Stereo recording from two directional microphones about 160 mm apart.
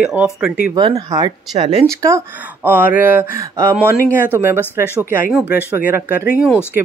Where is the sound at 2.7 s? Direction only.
10° right (ahead or behind).